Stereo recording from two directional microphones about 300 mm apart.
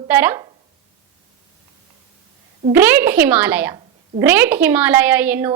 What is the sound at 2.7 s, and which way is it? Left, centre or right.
A woman's voice, centre.